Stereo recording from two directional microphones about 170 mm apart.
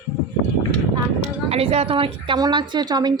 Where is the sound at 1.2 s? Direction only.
35° right (ahead or behind).